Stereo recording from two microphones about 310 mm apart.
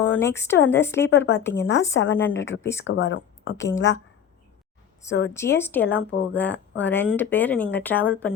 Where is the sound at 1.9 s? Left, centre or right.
Left.